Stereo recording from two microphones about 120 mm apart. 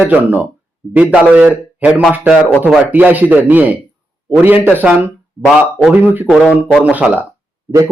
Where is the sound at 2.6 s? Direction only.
10° right (ahead or behind).